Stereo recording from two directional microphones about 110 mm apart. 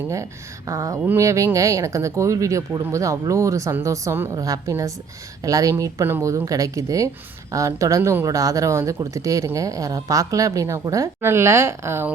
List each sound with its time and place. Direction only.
0.7 s speech: 30° right (ahead or behind)